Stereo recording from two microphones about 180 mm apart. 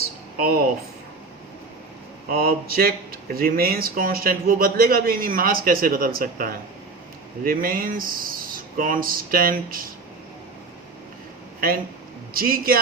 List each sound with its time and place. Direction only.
0.3 s speech: 55° right (ahead or behind)
2.3 s speech: 55° right (ahead or behind)
12.3 s speech: 55° right (ahead or behind)